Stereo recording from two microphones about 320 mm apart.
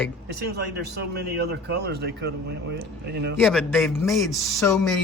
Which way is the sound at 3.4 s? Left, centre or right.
Centre.